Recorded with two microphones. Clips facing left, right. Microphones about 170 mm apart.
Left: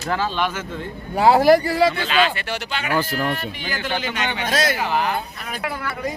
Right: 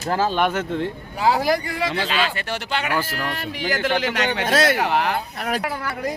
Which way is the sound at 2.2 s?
40° right (ahead or behind).